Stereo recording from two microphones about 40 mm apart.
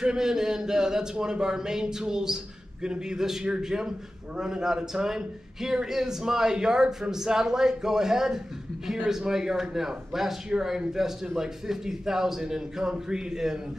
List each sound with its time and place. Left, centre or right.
0.0 s a man's voice: centre